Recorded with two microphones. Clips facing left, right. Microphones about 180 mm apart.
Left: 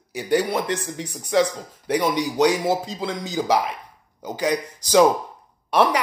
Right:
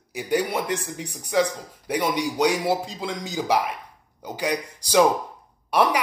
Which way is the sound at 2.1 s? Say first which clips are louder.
Left 2 dB; 35° left (ahead or behind).